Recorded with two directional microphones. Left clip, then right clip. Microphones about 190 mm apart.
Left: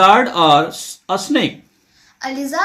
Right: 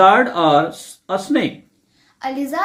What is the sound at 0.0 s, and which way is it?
Speech, 50° left (ahead or behind).